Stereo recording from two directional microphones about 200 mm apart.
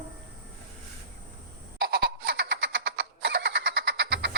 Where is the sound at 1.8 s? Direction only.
50° right (ahead or behind).